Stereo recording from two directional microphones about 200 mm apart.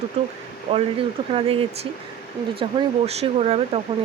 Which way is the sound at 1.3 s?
30° right (ahead or behind).